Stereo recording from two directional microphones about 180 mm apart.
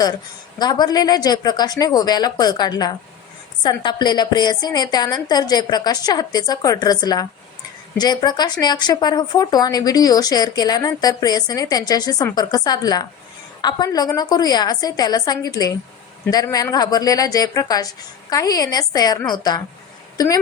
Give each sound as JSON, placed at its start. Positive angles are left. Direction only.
{"t": 0.6, "sound": "a woman's voice", "side_deg": 20}